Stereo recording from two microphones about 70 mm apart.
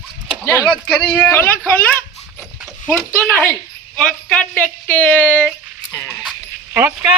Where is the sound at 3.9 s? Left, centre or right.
Centre.